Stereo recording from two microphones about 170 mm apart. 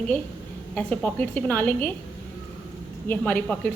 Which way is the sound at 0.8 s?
5° left (ahead or behind).